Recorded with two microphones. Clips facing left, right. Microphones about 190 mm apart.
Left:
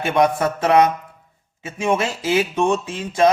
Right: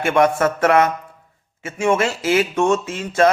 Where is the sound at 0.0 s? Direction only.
15° left (ahead or behind).